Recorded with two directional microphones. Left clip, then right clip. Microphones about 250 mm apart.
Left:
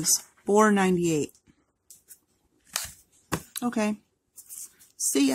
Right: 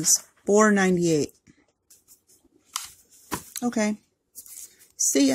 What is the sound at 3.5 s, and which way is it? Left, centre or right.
Speech, centre.